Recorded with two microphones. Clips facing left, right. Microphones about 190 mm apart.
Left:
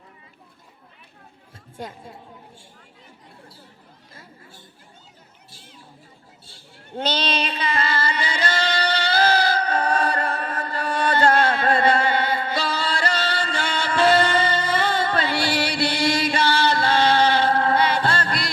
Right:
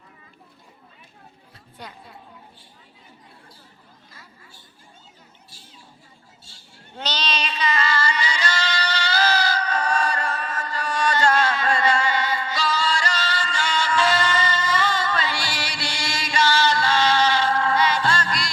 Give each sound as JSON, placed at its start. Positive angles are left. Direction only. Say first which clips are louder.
{"t": 1.8, "sound": "a woman's voice", "louder": "left 6 dB", "side_deg": 45}
{"t": 6.4, "sound": "female singing", "louder": "left 3 dB", "side_deg": 55}